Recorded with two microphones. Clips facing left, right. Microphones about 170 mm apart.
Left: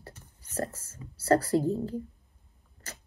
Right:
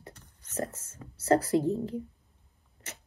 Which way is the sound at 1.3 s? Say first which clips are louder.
Even; 20° right (ahead or behind).